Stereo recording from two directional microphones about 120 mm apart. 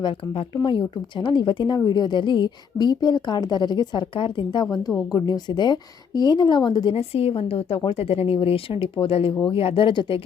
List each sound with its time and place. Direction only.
0.0 s speech: 45° left (ahead or behind)
6.9 s a woman's voice: 55° left (ahead or behind)